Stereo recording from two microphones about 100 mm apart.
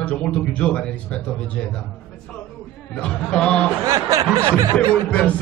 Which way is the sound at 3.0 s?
10° left (ahead or behind).